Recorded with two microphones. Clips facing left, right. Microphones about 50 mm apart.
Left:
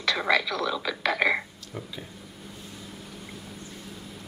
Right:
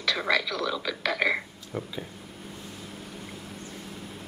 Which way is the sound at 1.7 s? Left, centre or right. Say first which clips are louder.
Right 8 dB; centre.